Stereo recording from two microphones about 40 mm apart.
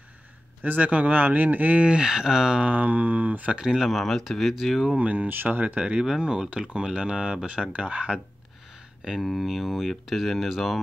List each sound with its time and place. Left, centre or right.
0.6 s speech: right
1.2 s speech: right
1.8 s speech: right
2.6 s speech: right
3.7 s speech: centre
4.9 s speech: right
5.3 s speech: right
5.9 s speech: centre
9.2 s speech: centre